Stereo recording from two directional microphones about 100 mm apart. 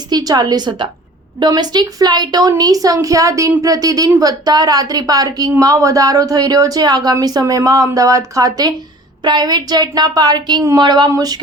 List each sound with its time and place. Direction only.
0.1 s a woman's voice: 40° right (ahead or behind)